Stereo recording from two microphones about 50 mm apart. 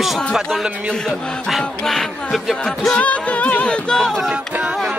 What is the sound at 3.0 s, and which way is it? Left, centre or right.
Music, left.